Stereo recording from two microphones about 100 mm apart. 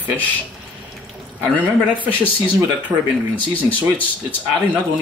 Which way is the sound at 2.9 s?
40° right (ahead or behind).